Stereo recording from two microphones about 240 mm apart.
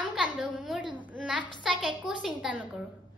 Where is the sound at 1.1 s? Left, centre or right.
Centre.